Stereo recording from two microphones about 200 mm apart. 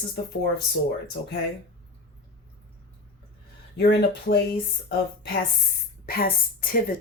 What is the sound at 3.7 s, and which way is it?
Speech, 55° left (ahead or behind).